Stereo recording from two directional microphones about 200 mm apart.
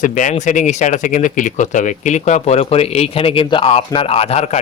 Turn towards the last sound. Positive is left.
turn(degrees=30)  # may be behind; listen again after turning